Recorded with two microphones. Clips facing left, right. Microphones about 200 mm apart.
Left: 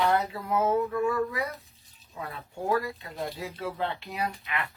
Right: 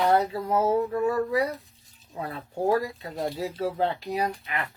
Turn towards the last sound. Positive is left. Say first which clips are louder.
# right 3 dB
turn(degrees=-40)  # may be behind; listen again after turning